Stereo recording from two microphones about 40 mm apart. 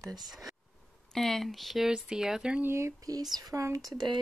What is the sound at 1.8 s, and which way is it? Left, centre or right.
Speech, centre.